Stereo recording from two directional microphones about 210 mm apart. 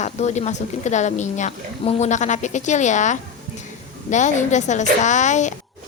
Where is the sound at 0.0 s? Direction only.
35° left (ahead or behind).